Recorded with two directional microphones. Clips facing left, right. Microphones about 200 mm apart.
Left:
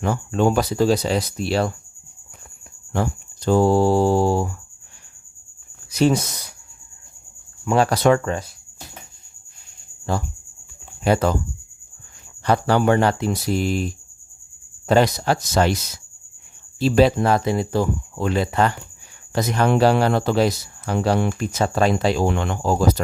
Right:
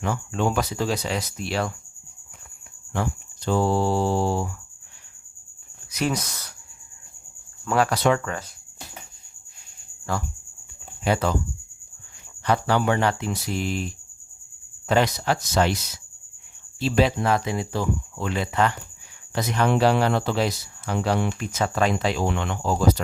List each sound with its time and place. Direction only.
0.0 s speech: 40° left (ahead or behind)
2.9 s speech: 40° left (ahead or behind)
5.9 s speech: 30° left (ahead or behind)
7.6 s cricket: 20° left (ahead or behind)
7.9 s speech: 45° left (ahead or behind)
10.1 s speech: 25° left (ahead or behind)
11.0 s speech: 40° left (ahead or behind)
12.5 s speech: 40° left (ahead or behind)
16.8 s speech: 40° left (ahead or behind)